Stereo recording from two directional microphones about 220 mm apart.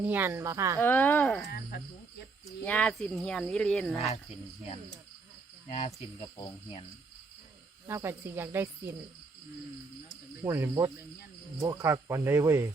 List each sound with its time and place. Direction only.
0.0 s speech: 10° right (ahead or behind)
0.8 s speech: 10° left (ahead or behind)
2.6 s speech: 5° left (ahead or behind)
5.6 s cricket: 30° left (ahead or behind)
7.9 s speech: 10° right (ahead or behind)
10.4 s speech: 15° right (ahead or behind)